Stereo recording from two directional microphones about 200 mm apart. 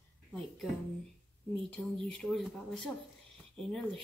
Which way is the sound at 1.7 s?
5° left (ahead or behind).